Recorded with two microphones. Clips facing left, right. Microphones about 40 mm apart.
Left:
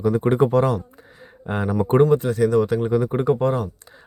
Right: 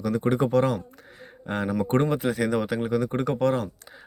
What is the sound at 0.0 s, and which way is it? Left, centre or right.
Speech, left.